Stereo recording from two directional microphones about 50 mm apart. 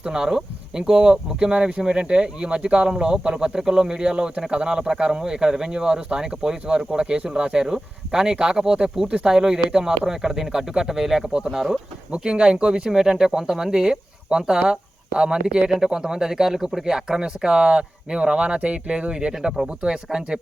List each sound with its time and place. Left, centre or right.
0.0 s speech: centre
12.1 s speech: centre